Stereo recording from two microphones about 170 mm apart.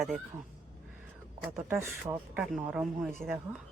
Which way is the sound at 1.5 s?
15° right (ahead or behind).